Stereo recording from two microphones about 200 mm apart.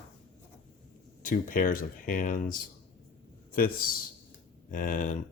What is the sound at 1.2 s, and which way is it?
Speech, 45° left (ahead or behind).